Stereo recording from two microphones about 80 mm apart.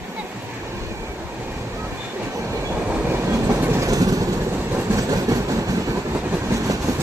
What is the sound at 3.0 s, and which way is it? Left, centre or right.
Train, right.